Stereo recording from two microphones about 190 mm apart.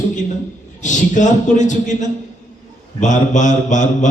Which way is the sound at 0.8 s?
40° left (ahead or behind).